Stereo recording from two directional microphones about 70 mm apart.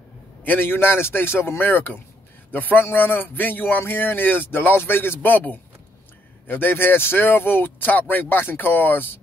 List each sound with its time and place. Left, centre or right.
0.4 s a man's voice: left